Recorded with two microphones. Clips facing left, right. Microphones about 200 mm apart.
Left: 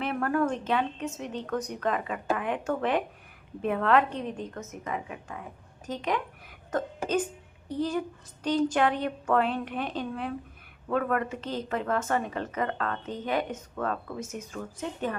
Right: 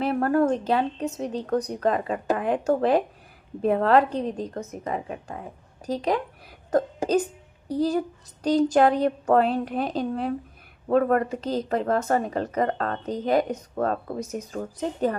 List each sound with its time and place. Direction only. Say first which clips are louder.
0.0 s a woman's voice: right 6 dB; 35° right (ahead or behind)